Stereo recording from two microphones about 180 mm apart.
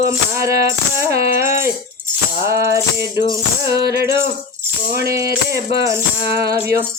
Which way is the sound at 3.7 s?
65° right (ahead or behind).